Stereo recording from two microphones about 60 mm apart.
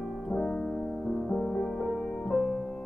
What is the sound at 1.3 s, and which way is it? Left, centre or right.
Music, centre.